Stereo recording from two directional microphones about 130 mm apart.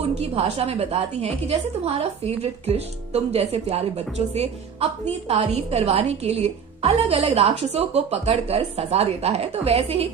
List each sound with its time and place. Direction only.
0.0 s a woman's voice: 50° right (ahead or behind)